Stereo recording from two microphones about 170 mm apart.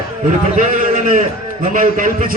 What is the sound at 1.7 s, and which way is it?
Speech, 50° right (ahead or behind).